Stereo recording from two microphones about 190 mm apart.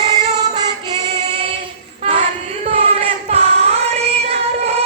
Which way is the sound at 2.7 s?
30° right (ahead or behind).